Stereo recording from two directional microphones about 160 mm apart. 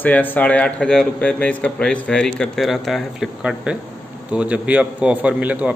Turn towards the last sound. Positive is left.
turn(degrees=-10)  # may be behind; listen again after turning